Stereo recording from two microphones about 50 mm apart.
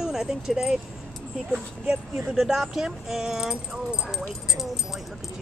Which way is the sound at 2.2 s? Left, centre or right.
Centre.